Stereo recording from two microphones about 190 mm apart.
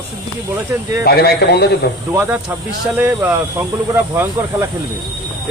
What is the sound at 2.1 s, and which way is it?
Speech, 15° right (ahead or behind).